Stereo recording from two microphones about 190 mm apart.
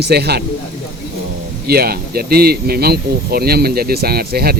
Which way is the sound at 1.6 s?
55° right (ahead or behind).